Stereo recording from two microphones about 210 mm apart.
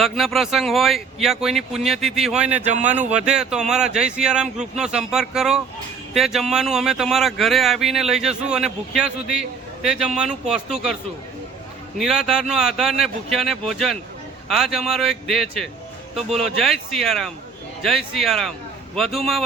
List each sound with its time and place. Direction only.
0.0 s speech: centre (ahead or behind)
2.9 s speech: 35° right (ahead or behind)
3.2 s speech: 5° right (ahead or behind)
11.9 s speech: centre (ahead or behind)